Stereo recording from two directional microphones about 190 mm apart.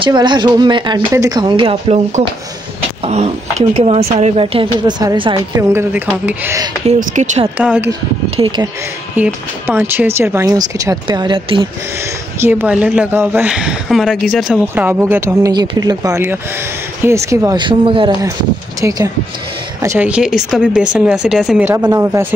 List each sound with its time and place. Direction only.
0.0 s speech: 25° right (ahead or behind)
5.6 s a woman's voice: 15° right (ahead or behind)
6.9 s speech: 35° right (ahead or behind)
7.5 s a woman's voice: 10° right (ahead or behind)
8.4 s speech: 25° right (ahead or behind)
9.1 s a woman's voice: 10° right (ahead or behind); by 11.7 s 30° right (ahead or behind)
12.4 s a woman's voice: 10° right (ahead or behind)